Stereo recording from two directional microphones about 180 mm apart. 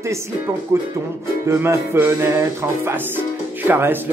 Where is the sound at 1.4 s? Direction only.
15° right (ahead or behind).